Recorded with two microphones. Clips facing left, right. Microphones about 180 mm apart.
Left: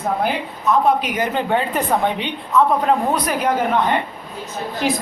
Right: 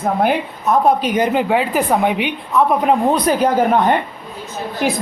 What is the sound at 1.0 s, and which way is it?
A woman's voice, 20° right (ahead or behind).